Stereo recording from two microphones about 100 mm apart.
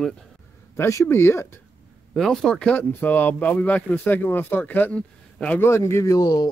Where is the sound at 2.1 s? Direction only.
5° left (ahead or behind).